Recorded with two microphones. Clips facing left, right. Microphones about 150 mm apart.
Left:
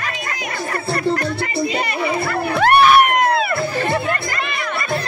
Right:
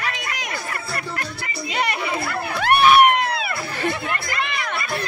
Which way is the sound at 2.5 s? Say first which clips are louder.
Left 3 dB; 50° left (ahead or behind).